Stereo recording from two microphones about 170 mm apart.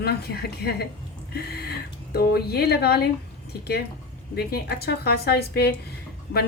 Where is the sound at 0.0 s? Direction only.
70° left (ahead or behind).